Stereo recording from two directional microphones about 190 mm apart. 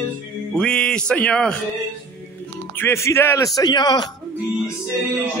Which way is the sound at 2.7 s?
10° left (ahead or behind).